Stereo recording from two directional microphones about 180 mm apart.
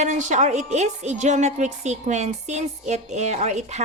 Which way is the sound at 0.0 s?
40° right (ahead or behind).